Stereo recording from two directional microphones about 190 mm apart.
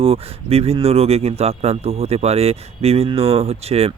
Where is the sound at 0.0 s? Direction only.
30° right (ahead or behind).